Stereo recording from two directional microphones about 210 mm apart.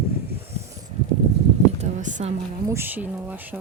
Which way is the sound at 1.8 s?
35° right (ahead or behind).